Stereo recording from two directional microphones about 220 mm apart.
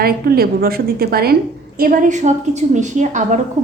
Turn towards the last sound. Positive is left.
turn(degrees=-35)  # may be behind; listen again after turning